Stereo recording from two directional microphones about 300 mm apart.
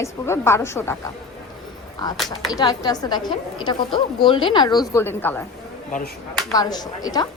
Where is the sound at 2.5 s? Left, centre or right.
Centre.